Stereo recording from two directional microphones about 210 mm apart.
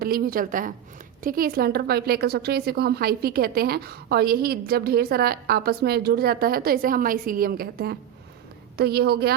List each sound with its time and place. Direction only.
0.0 s a woman's voice: 45° right (ahead or behind)